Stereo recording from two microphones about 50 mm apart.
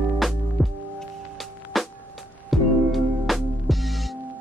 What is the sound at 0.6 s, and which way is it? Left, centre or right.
Music, centre.